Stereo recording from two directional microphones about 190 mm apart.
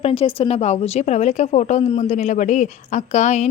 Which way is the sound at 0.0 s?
30° left (ahead or behind).